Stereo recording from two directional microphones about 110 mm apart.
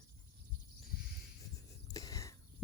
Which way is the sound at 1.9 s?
35° left (ahead or behind).